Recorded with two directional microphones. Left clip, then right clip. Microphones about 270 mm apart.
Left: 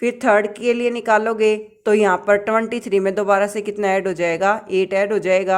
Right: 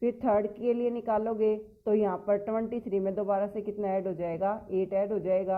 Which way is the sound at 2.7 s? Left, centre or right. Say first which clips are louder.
Left 12 dB; left.